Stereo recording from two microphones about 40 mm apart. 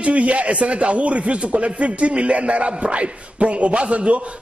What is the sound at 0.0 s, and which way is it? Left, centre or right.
A man's voice, right.